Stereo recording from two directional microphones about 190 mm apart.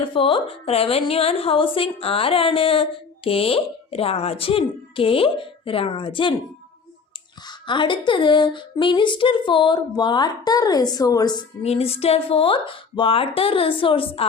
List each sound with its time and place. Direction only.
0.0 s speech: 30° left (ahead or behind)
7.7 s speech: 25° left (ahead or behind)
11.6 s speech: 30° left (ahead or behind)